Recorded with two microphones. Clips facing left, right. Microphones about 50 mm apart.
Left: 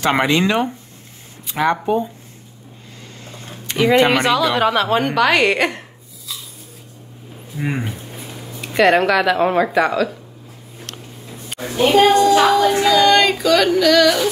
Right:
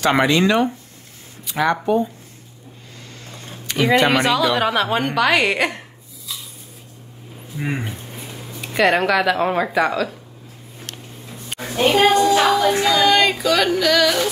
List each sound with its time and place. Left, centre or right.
0.0 s speech: left
4.1 s yodeling: centre
4.6 s speech: centre
7.5 s yodeling: centre
11.6 s a woman's voice: centre
11.9 s yodeling: centre